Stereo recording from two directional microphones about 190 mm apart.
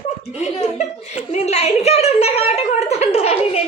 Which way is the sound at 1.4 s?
35° left (ahead or behind).